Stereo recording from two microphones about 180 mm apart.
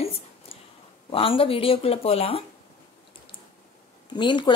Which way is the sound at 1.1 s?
30° left (ahead or behind).